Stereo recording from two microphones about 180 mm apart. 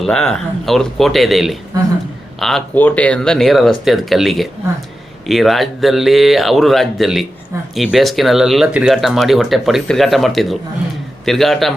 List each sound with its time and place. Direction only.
0.0 s speech: 5° left (ahead or behind)
1.7 s a man's voice: 20° right (ahead or behind)
2.4 s speech: centre (ahead or behind)